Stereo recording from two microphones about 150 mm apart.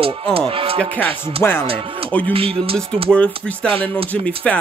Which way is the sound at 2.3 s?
40° right (ahead or behind).